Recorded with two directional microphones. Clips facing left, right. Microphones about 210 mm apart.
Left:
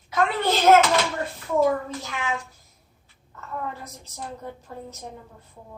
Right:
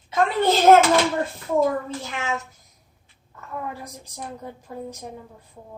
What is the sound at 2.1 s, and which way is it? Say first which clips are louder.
Speech: even; 25° right (ahead or behind).